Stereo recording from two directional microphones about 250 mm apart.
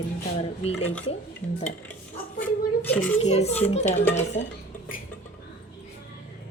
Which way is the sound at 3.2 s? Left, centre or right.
Left.